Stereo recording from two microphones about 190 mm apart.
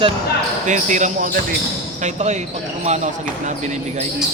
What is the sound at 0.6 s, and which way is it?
Speech, 40° right (ahead or behind).